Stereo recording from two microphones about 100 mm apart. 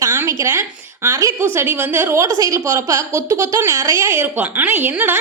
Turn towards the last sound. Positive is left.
turn(degrees=-20)  # may be behind; listen again after turning